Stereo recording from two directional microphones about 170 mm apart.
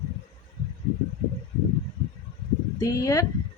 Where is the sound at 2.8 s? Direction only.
20° left (ahead or behind).